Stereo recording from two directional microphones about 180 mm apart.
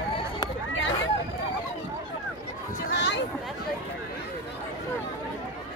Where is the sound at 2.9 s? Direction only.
75° left (ahead or behind).